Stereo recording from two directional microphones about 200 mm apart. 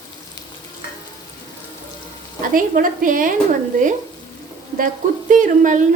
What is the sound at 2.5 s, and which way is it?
Speech, 45° right (ahead or behind).